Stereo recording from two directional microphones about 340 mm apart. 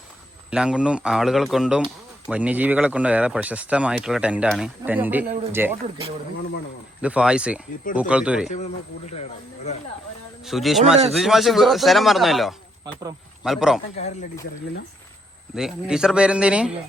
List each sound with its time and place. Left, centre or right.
0.5 s speech: centre
7.0 s speech: centre
10.4 s speech: centre
13.9 s a man's voice: centre
15.5 s speech: centre